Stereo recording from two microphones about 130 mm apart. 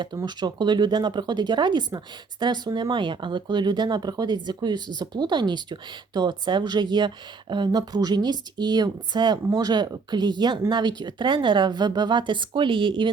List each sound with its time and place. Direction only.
0.0 s speech: 35° right (ahead or behind)